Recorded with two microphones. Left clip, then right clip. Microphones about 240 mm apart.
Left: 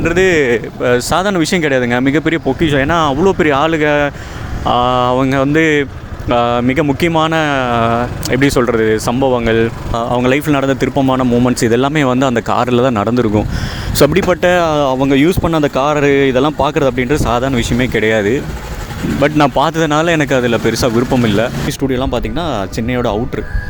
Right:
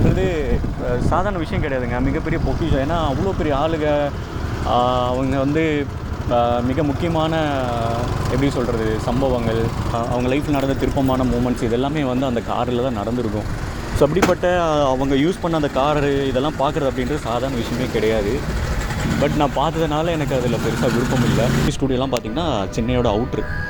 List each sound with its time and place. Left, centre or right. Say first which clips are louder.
0.2 s speech: left 11 dB; left
21.9 s speech: left 4 dB; left